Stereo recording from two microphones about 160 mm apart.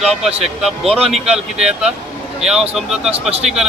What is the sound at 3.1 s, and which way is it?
Speech, 40° right (ahead or behind).